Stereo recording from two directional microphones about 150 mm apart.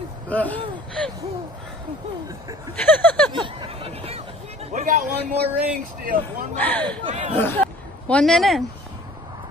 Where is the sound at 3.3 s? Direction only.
35° right (ahead or behind).